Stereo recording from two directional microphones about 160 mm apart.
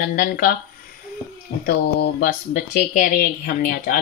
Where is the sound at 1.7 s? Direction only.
85° left.